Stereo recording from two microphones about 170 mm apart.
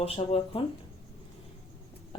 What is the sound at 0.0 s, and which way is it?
Speech, 35° left (ahead or behind).